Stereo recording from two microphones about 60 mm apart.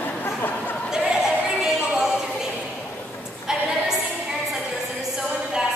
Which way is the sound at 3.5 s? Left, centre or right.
Centre.